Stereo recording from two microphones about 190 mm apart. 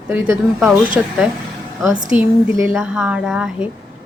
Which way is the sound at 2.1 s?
10° right (ahead or behind).